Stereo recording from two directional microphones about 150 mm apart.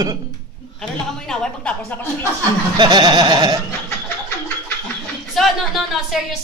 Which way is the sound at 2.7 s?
30° right (ahead or behind).